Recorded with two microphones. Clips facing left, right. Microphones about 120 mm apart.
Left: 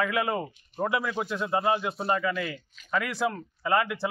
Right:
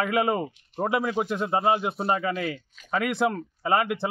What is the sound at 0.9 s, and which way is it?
Speech, 40° right (ahead or behind).